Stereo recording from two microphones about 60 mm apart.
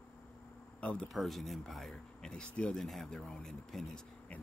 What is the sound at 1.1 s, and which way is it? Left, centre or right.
Speech, centre.